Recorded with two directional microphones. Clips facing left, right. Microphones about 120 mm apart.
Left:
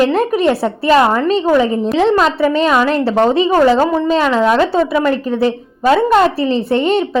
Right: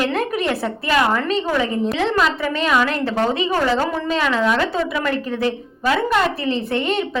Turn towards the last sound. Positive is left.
turn(degrees=30)  # may be behind; listen again after turning